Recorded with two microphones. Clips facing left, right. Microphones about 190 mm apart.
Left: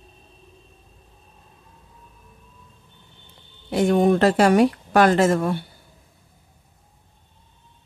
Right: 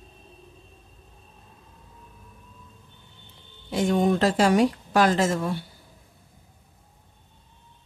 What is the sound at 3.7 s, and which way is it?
Speech, 60° left (ahead or behind).